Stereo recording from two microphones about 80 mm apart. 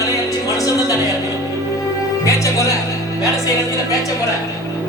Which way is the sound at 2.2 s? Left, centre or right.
Left.